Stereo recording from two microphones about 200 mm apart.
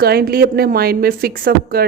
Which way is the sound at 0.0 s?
50° right (ahead or behind).